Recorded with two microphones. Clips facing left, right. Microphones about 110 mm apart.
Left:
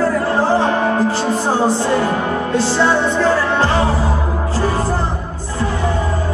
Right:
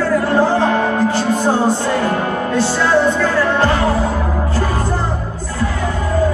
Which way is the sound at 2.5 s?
25° left (ahead or behind).